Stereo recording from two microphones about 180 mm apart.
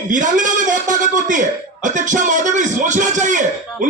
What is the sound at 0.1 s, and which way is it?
A man's voice, 45° right (ahead or behind).